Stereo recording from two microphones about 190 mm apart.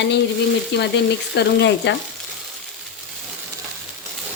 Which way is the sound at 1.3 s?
65° left (ahead or behind).